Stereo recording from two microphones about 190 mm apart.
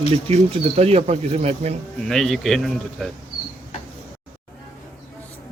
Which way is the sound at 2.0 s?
Centre (ahead or behind).